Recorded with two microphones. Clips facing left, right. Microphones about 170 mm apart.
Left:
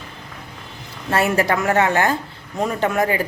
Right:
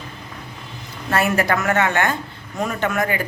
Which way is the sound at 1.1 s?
25° left (ahead or behind).